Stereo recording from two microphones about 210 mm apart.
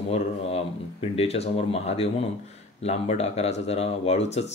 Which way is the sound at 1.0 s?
30° left (ahead or behind).